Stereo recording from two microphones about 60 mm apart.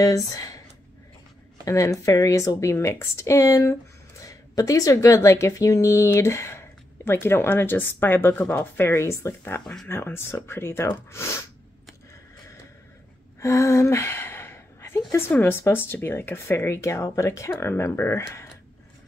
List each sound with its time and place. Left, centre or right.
0.0 s speech: left
1.7 s speech: left
4.2 s a sound: left
5.0 s speech: left
5.5 s speech: left
8.9 s speech: left
9.8 s speech: left
13.4 s gasp: left
15.4 s speech: left